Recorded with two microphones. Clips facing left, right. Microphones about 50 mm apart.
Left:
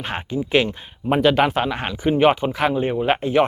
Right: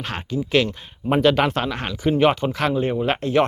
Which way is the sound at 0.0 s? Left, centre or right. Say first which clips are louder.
Left 1 dB; centre.